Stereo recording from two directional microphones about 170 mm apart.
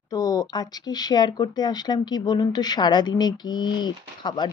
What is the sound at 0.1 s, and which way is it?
Speech, 20° left (ahead or behind).